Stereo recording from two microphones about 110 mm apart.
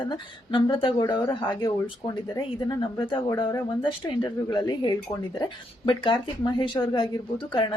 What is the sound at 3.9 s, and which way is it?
Speech, 45° left (ahead or behind).